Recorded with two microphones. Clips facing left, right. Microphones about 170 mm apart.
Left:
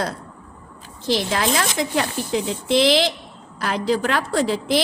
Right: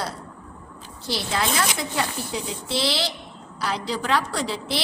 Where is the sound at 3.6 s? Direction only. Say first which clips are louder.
Left 6 dB; 50° left (ahead or behind).